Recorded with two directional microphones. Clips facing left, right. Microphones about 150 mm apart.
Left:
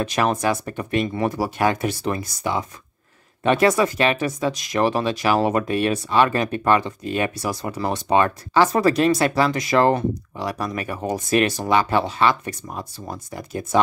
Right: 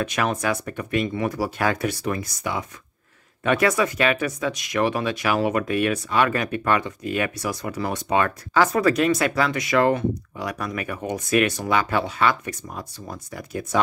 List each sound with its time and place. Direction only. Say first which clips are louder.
0.0 s speech: left 3 dB; 35° left (ahead or behind)